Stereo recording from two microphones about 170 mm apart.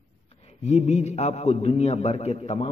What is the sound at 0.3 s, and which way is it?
A man's voice, 40° left (ahead or behind).